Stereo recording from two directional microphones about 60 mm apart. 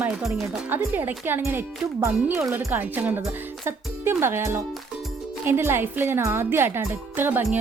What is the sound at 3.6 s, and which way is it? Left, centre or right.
Speech, right.